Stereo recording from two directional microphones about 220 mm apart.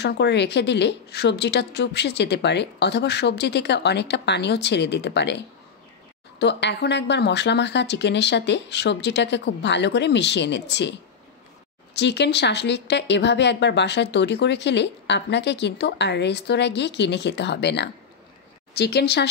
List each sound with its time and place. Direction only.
0.0 s speech: 50° left (ahead or behind)
6.4 s speech: 50° left (ahead or behind)